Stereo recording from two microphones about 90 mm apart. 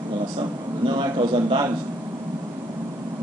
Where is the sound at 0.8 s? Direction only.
60° right (ahead or behind).